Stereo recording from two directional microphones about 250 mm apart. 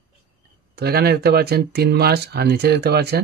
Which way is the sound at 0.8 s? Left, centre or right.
Right.